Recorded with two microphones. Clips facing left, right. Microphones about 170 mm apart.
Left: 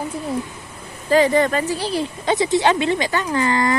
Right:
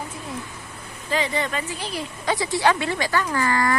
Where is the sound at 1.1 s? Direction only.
45° left (ahead or behind).